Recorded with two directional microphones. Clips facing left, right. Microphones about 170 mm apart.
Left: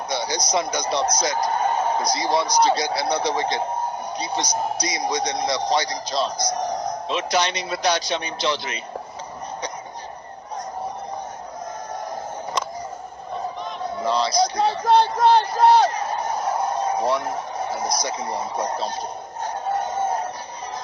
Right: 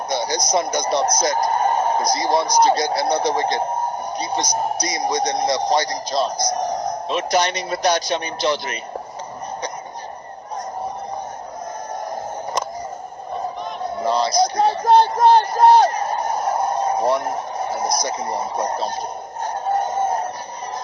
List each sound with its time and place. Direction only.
0.1 s a man's voice: 45° right (ahead or behind)
14.0 s a man's voice: 45° right (ahead or behind)
19.4 s synthetic singing: 45° right (ahead or behind)